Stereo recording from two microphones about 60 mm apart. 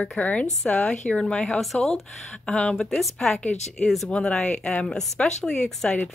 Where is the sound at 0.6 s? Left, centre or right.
Centre.